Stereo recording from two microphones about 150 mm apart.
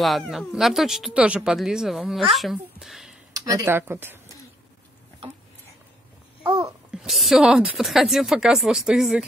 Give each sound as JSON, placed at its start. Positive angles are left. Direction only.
{"t": 0.0, "sound": "speech", "side_deg": 0}
{"t": 3.3, "sound": "speech", "side_deg": -20}
{"t": 6.6, "sound": "speech", "side_deg": -5}